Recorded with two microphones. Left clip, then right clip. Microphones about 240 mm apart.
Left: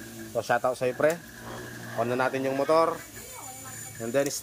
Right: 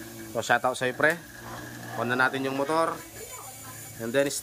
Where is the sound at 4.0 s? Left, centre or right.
Centre.